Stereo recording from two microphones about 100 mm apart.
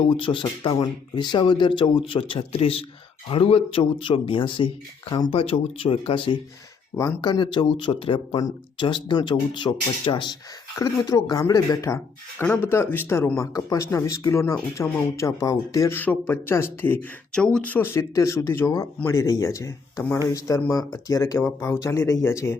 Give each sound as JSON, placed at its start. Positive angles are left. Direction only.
{"t": 0.1, "sound": "speech", "side_deg": 60}
{"t": 3.2, "sound": "speech", "side_deg": 70}
{"t": 5.3, "sound": "speech", "side_deg": 65}
{"t": 7.2, "sound": "speech", "side_deg": 45}
{"t": 10.8, "sound": "speech", "side_deg": 35}
{"t": 12.4, "sound": "speech", "side_deg": 20}
{"t": 16.0, "sound": "speech", "side_deg": 20}
{"t": 17.3, "sound": "speech", "side_deg": 10}
{"t": 18.1, "sound": "speech", "side_deg": 30}